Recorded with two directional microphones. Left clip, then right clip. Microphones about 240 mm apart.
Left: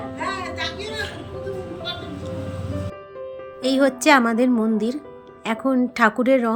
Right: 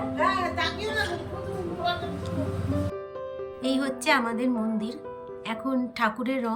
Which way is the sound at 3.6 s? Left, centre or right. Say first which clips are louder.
Left 9 dB; centre.